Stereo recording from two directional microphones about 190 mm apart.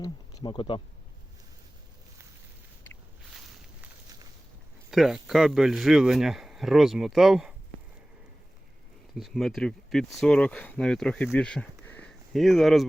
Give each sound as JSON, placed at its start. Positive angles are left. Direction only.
{"t": 0.0, "sound": "speech", "side_deg": 20}
{"t": 4.9, "sound": "speech", "side_deg": 0}
{"t": 9.1, "sound": "speech", "side_deg": 0}